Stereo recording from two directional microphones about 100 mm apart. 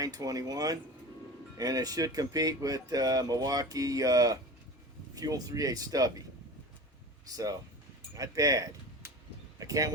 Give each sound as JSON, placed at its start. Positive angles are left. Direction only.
{"t": 0.0, "sound": "speech", "side_deg": -35}
{"t": 7.3, "sound": "speech", "side_deg": -35}